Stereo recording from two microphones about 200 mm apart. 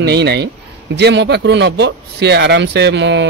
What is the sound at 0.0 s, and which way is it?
Speech, 55° right (ahead or behind).